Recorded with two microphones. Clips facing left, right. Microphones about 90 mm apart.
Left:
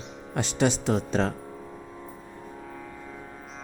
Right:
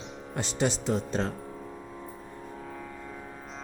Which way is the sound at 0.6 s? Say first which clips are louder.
Left 3 dB; 75° left (ahead or behind).